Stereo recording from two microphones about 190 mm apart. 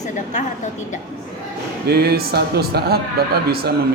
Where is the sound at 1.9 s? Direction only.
55° right (ahead or behind).